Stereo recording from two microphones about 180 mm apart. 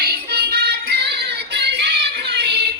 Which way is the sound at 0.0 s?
60° right (ahead or behind).